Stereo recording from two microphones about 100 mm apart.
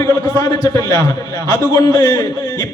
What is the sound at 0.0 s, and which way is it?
A man's voice, 35° left (ahead or behind).